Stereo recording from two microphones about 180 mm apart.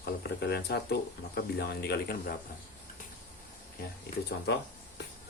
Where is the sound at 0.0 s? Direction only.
65° left (ahead or behind).